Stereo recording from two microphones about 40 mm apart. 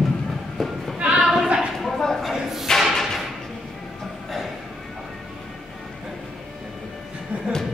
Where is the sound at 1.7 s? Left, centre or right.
Centre.